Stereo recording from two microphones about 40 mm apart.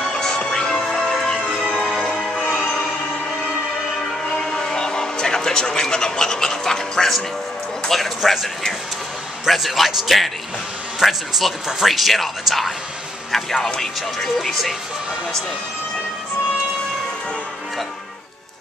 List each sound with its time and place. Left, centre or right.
0.1 s music: left
2.0 s music: left
4.6 s a sound: centre
7.9 s speech: centre
9.5 s speech: centre
13.7 s speech: centre